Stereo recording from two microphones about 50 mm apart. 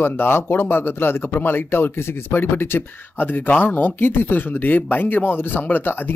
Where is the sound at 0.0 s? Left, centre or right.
Left.